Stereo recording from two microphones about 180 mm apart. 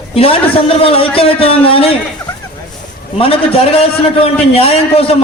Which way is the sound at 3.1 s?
30° left (ahead or behind).